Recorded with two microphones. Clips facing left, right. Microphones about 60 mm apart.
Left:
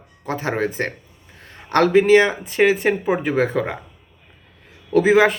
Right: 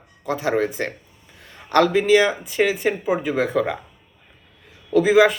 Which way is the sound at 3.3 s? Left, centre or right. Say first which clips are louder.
Left 1 dB; left.